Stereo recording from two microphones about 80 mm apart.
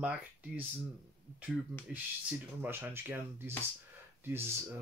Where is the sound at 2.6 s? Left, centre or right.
Right.